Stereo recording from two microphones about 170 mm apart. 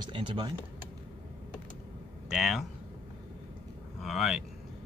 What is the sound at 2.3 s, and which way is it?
Speech, centre (ahead or behind).